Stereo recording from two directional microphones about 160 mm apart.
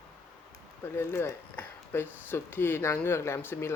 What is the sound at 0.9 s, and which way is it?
Speech, 15° left (ahead or behind).